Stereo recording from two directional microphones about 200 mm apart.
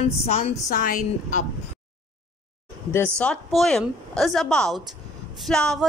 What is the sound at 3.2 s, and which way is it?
Speech, 5° left (ahead or behind).